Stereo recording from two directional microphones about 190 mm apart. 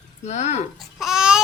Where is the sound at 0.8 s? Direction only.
Centre (ahead or behind).